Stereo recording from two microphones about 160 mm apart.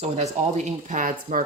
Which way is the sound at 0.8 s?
50° right (ahead or behind).